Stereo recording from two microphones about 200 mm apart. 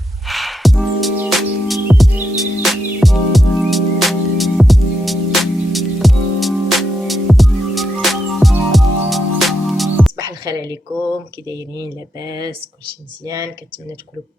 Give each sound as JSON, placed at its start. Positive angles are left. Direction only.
{"t": 0.3, "sound": "music", "side_deg": 0}
{"t": 10.2, "sound": "music", "side_deg": -20}
{"t": 11.4, "sound": "speech", "side_deg": -20}